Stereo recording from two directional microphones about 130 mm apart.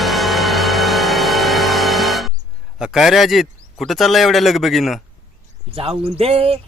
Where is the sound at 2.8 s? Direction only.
Centre (ahead or behind).